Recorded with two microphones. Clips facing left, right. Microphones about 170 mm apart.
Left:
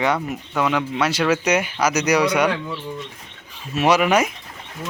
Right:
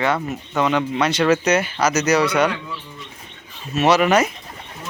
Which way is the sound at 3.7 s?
10° left (ahead or behind).